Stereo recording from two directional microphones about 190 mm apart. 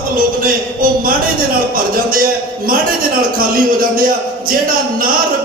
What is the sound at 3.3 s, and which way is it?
Speech, 50° right (ahead or behind).